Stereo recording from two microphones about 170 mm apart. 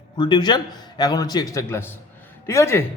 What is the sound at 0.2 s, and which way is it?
A man's voice, 25° left (ahead or behind).